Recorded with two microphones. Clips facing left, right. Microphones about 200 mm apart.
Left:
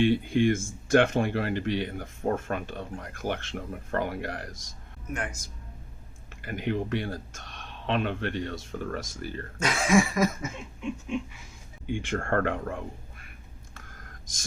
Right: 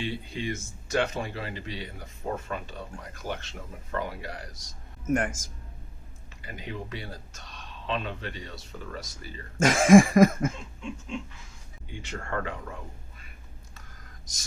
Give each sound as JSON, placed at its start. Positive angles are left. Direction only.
{"t": 0.0, "sound": "speech", "side_deg": 50}
{"t": 5.0, "sound": "speech", "side_deg": -45}
{"t": 6.4, "sound": "speech", "side_deg": 60}
{"t": 9.6, "sound": "a sound", "side_deg": -45}
{"t": 11.9, "sound": "speech", "side_deg": 55}
{"t": 13.7, "sound": "a sound", "side_deg": 50}